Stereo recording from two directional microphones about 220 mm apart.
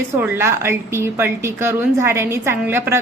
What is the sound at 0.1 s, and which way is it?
A woman's voice, 10° right (ahead or behind).